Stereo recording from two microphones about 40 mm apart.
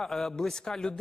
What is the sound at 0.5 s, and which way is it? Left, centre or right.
Speech, centre.